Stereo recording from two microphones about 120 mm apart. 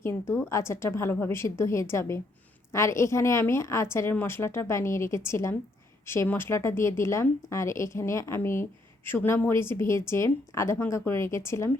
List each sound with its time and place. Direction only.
0.0 s a woman's voice: 20° left (ahead or behind)